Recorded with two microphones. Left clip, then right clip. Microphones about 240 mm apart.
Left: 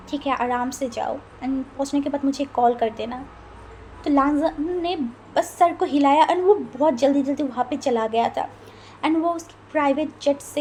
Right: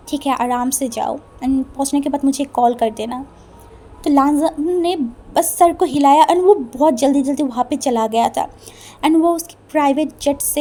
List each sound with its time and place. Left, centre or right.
0.1 s a woman's voice: right